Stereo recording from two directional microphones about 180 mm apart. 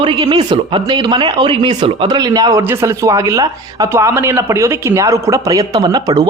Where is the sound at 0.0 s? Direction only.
30° right (ahead or behind).